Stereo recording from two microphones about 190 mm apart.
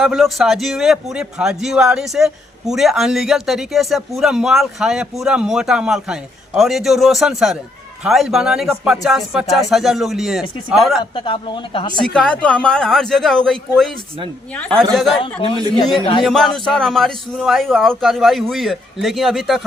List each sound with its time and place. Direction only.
0.0 s a man's voice: centre (ahead or behind)
11.0 s a woman's voice: 25° left (ahead or behind)
12.1 s a man's voice: 5° left (ahead or behind)
16.2 s a man's voice: centre (ahead or behind)